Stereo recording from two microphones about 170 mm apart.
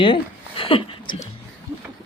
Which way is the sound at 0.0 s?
30° left (ahead or behind).